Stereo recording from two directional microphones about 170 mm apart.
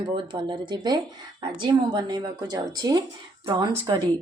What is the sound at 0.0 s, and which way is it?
A woman's voice, 25° right (ahead or behind).